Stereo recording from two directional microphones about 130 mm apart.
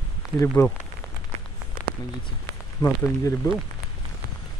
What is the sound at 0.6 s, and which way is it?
Speech, 20° left (ahead or behind).